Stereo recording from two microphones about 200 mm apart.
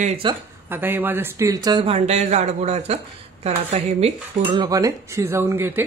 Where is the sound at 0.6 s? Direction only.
10° right (ahead or behind); by 4.1 s 30° right (ahead or behind).